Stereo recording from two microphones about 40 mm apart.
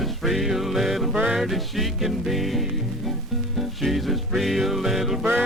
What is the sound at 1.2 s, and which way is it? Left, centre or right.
Music, centre.